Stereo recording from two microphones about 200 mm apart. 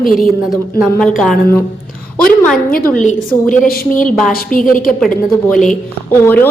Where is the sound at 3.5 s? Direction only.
45° left (ahead or behind).